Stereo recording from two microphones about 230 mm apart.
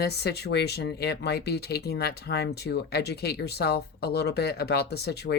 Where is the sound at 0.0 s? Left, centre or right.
Left.